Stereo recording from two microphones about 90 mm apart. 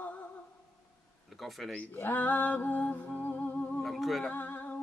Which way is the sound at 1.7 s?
20° left (ahead or behind).